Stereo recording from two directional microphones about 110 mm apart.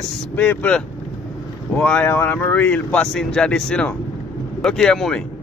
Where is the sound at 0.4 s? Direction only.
15° left (ahead or behind).